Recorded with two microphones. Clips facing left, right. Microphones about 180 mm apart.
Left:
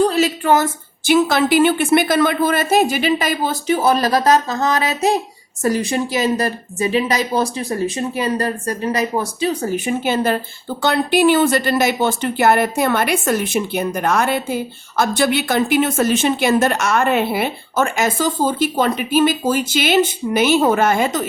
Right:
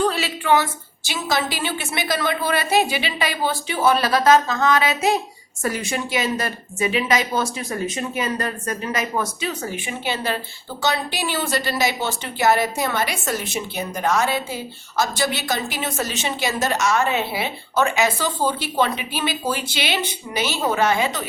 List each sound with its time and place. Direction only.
0.0 s a woman's voice: 40° left (ahead or behind)